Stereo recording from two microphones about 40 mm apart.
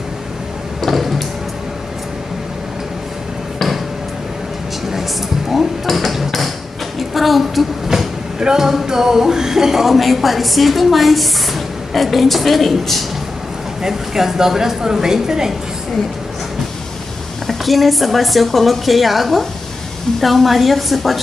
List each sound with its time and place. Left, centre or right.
0.7 s a sound: centre
5.9 s hammer: centre
7.0 s a sound: centre
8.4 s speech: centre
13.8 s a woman's voice: centre
17.5 s speech: centre